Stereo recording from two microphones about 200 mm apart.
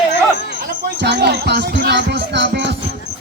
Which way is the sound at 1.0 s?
55° right (ahead or behind).